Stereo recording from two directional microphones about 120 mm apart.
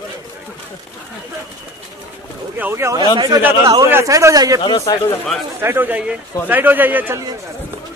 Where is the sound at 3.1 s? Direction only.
35° right (ahead or behind).